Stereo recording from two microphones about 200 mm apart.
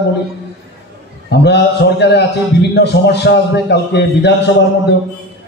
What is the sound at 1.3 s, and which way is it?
A man's voice, 60° left (ahead or behind).